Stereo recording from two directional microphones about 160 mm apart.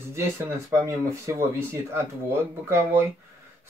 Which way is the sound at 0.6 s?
15° right (ahead or behind).